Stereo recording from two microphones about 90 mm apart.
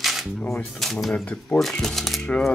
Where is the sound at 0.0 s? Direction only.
Centre (ahead or behind).